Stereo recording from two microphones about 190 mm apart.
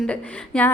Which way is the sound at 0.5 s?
5° left (ahead or behind).